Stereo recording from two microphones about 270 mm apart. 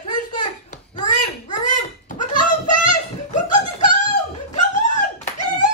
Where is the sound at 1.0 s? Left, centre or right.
Left.